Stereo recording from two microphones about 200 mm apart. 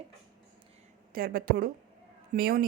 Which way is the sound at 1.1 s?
45° right (ahead or behind).